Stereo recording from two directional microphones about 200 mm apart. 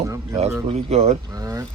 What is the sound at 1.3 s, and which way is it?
Speech, 15° right (ahead or behind).